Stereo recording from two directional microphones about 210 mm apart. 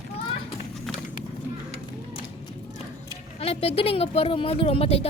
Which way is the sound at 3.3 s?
30° left (ahead or behind).